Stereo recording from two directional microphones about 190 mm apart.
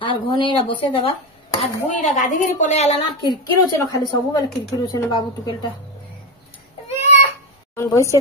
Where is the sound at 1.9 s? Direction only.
40° left (ahead or behind).